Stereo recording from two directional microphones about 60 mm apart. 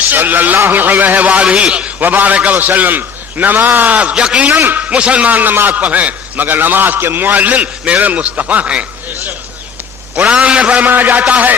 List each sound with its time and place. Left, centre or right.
0.0 s a man's voice: right
4.1 s a man's voice: centre
4.6 s a man's voice: right
10.1 s a man's voice: right
10.9 s a man's voice: right